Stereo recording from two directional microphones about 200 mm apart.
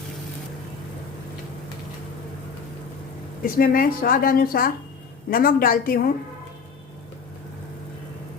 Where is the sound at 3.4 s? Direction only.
45° left (ahead or behind).